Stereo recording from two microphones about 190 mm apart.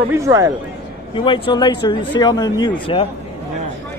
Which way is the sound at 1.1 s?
25° left (ahead or behind).